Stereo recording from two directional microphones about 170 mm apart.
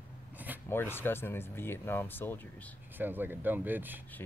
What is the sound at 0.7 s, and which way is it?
Speech, 15° left (ahead or behind).